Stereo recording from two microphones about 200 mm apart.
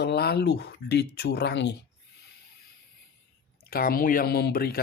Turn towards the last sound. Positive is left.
turn(degrees=50)  # may be behind; listen again after turning